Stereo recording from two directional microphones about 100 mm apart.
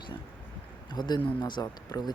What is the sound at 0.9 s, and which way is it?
Speech, 45° left (ahead or behind).